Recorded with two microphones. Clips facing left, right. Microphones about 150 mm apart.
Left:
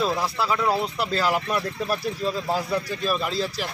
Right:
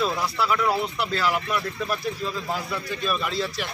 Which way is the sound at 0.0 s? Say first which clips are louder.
Left 1 dB; 25° left (ahead or behind).